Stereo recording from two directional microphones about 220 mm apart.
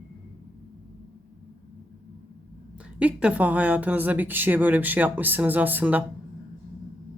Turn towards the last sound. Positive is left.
turn(degrees=-5)  # may be behind; listen again after turning